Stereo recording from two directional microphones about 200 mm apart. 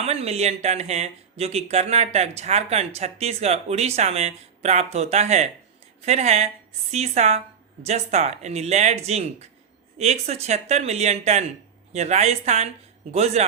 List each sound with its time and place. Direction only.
0.0 s speech: 30° right (ahead or behind)